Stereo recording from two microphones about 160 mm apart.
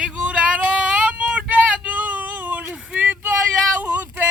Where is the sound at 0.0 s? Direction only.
10° right (ahead or behind).